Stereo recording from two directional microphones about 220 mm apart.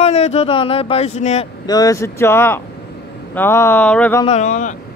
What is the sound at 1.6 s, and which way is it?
Speech, 15° left (ahead or behind).